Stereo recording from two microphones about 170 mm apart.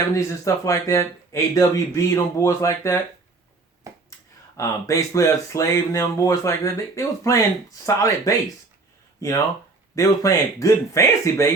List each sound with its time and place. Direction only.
0.1 s speech: 15° left (ahead or behind)
3.9 s a sound: 20° right (ahead or behind)
4.5 s speech: 20° left (ahead or behind)